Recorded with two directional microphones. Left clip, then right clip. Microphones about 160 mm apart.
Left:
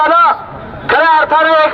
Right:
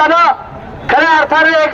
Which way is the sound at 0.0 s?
15° right (ahead or behind).